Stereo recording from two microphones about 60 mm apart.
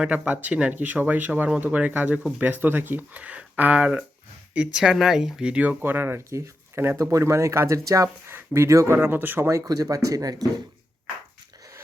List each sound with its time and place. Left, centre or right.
0.1 s speech: right
5.5 s speech: right
5.8 s speech: right
7.0 s speech: right
8.5 s speech: right
9.0 s speech: right
9.6 s speech: right